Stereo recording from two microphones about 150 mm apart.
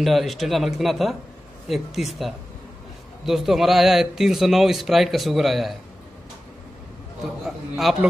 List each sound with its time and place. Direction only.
0.0 s a man's voice: centre (ahead or behind)
7.4 s a man's voice: centre (ahead or behind)